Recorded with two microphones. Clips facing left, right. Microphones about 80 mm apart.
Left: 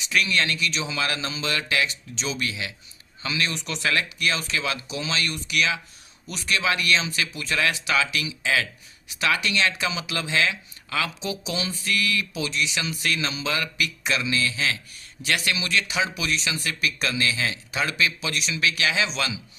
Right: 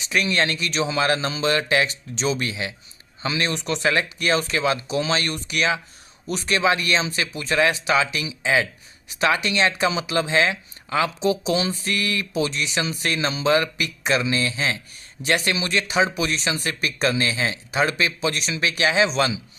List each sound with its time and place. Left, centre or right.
0.0 s speech: right